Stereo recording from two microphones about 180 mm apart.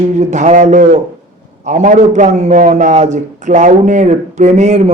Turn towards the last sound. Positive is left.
turn(degrees=-35)  # may be behind; listen again after turning